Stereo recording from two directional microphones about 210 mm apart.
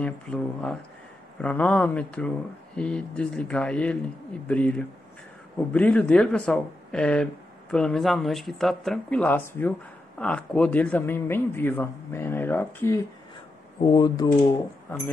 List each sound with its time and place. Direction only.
0.0 s speech: 5° left (ahead or behind)